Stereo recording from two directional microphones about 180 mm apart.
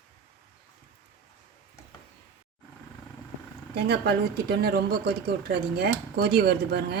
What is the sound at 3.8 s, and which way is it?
Speech, 65° right (ahead or behind).